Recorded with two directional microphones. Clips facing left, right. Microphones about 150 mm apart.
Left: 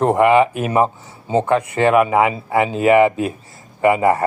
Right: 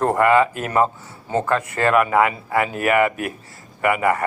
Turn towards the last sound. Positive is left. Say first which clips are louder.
# left 5 dB
turn(degrees=25)  # may be behind; listen again after turning